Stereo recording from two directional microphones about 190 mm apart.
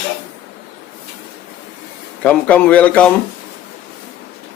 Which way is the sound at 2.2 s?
5° left (ahead or behind).